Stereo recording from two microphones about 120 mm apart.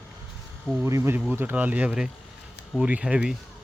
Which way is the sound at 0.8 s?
25° right (ahead or behind).